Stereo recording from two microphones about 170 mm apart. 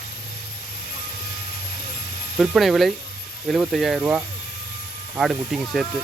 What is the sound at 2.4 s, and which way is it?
Speech, centre (ahead or behind).